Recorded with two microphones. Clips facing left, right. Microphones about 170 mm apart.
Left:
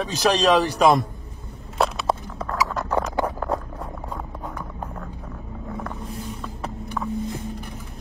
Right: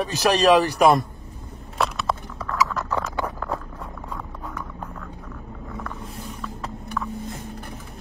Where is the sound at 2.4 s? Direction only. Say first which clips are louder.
Even; 35° left (ahead or behind).